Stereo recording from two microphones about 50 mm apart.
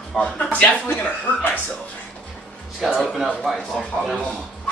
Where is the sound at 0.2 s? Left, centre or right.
Left.